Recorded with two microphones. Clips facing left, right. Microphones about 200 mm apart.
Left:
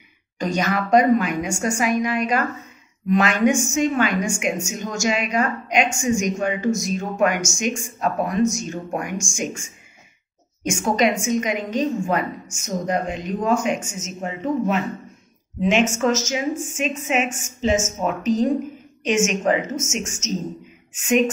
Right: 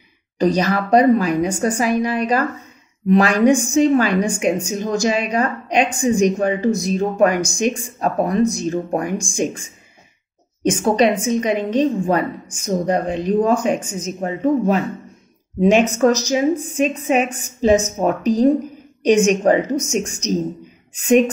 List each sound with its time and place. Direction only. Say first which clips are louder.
0.4 s a woman's voice: right 5 dB; 35° right (ahead or behind)